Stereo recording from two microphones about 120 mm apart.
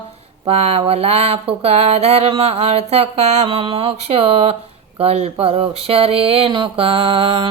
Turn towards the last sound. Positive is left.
turn(degrees=-55)  # may be behind; listen again after turning